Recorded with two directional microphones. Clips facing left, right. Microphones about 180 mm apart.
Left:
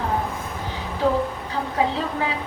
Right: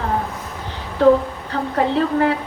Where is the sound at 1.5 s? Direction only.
60° right (ahead or behind).